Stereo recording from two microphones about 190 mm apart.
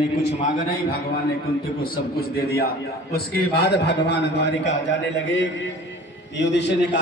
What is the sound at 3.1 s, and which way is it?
A man's voice, 60° left (ahead or behind).